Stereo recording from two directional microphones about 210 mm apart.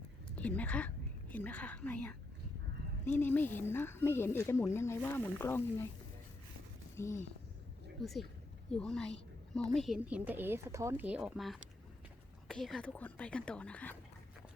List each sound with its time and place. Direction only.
0.3 s a woman's voice: 5° left (ahead or behind)
3.2 s speech: 10° left (ahead or behind)
6.9 s speech: 15° left (ahead or behind)
8.0 s speech: centre (ahead or behind)